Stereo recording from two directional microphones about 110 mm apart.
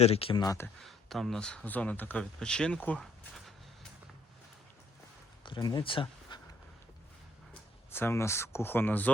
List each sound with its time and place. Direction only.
0.0 s speech: 65° left (ahead or behind)
0.8 s speech: centre (ahead or behind)
5.5 s speech: 35° left (ahead or behind)
5.8 s speech: 50° left (ahead or behind)
7.9 s speech: 20° left (ahead or behind)